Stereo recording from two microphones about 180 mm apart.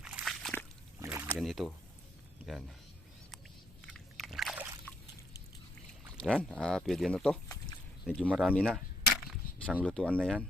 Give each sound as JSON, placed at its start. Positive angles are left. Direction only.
{"t": 0.0, "sound": "slosh", "side_deg": -5}
{"t": 1.0, "sound": "rowboat", "side_deg": -15}
{"t": 1.4, "sound": "speech", "side_deg": 0}
{"t": 3.8, "sound": "biting", "side_deg": 0}
{"t": 6.1, "sound": "speech", "side_deg": 0}
{"t": 9.8, "sound": "speech", "side_deg": 5}
{"t": 10.2, "sound": "speech", "side_deg": -10}